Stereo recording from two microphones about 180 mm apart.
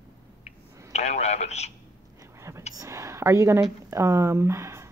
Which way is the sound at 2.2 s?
15° right (ahead or behind).